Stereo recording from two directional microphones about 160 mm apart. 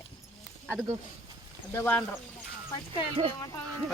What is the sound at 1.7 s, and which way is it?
Speech, 15° left (ahead or behind).